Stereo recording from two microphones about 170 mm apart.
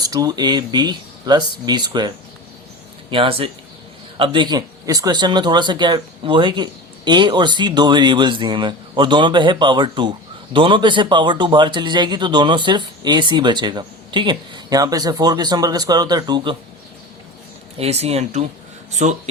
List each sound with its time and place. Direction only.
0.0 s speech: 25° right (ahead or behind)
17.7 s speech: 40° right (ahead or behind)